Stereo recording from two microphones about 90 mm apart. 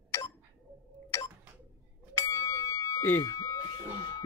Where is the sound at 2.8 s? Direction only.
30° left (ahead or behind).